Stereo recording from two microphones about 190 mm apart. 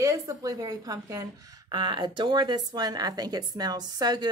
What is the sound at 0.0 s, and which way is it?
Speech, 15° right (ahead or behind).